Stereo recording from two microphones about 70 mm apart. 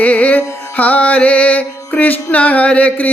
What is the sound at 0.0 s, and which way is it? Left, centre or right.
Carnatic music, left.